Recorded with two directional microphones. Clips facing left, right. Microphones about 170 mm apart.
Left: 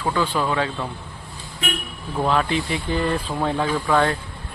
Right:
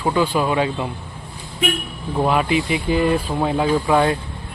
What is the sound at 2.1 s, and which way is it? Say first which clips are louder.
Speech: right 3 dB; 15° right (ahead or behind).